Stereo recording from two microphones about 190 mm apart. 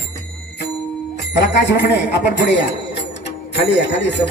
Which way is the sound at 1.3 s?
65° left (ahead or behind).